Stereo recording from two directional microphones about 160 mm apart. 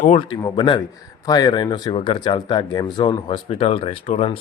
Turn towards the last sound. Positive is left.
turn(degrees=40)  # may be behind; listen again after turning